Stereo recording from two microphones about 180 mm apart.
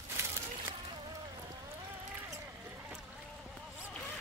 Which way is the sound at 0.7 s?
25° right (ahead or behind).